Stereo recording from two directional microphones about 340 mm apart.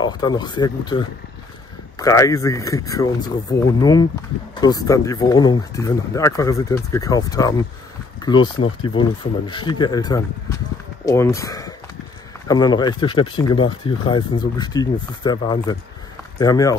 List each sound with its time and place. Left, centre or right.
0.0 s speech: centre